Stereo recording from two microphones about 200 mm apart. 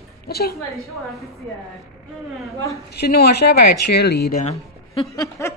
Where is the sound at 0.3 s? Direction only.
50° left (ahead or behind).